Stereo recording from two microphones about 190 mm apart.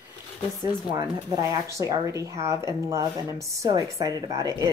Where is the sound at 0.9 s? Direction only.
15° right (ahead or behind).